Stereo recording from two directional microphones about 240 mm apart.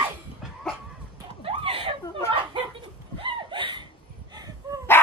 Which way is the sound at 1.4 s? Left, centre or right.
Right.